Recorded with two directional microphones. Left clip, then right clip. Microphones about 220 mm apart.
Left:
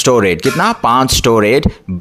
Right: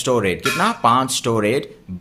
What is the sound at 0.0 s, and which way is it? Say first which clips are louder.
Speech: left 8 dB; 35° left (ahead or behind).